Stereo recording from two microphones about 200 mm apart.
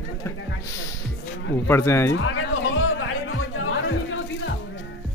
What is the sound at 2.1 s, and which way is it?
Speech, 80° left.